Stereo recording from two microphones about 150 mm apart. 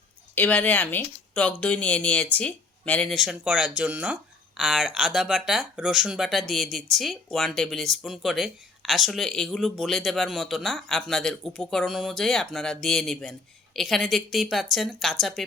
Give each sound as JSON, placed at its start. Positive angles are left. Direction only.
{"t": 0.3, "sound": "speech", "side_deg": 10}